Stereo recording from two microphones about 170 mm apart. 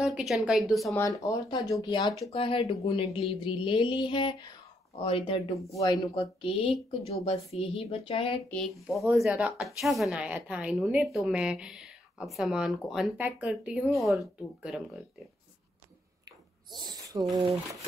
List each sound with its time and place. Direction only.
0.0 s a woman's voice: 5° right (ahead or behind)
0.9 s speech: 20° left (ahead or behind); by 5.6 s 35° left (ahead or behind)
5.7 s speech: 20° left (ahead or behind)
6.4 s speech: 35° left (ahead or behind)
8.5 s a woman's voice: centre (ahead or behind)
16.8 s speech: 20° right (ahead or behind)